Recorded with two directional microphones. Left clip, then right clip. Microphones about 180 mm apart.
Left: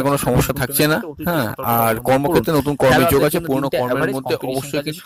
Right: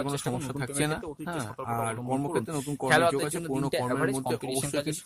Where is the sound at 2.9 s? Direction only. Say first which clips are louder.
Left 8 dB; 30° left (ahead or behind).